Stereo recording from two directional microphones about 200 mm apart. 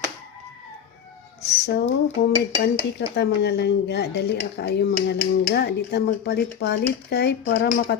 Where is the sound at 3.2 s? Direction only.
55° left (ahead or behind).